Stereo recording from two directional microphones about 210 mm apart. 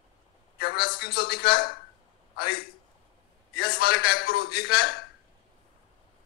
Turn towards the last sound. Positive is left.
turn(degrees=50)  # may be behind; listen again after turning